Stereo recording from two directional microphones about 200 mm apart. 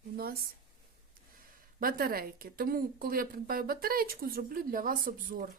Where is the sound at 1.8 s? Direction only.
45° right (ahead or behind).